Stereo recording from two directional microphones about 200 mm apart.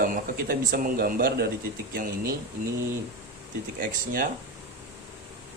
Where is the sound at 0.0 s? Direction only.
45° right (ahead or behind).